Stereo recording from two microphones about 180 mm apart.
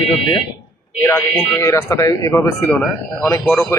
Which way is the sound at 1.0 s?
15° left (ahead or behind).